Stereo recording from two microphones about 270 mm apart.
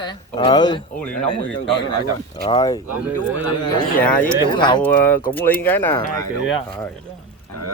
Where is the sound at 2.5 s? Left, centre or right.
Centre.